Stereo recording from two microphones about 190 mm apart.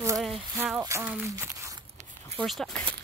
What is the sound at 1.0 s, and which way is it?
Speech, 10° right (ahead or behind).